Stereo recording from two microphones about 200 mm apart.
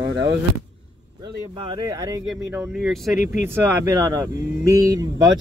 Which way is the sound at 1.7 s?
20° right (ahead or behind).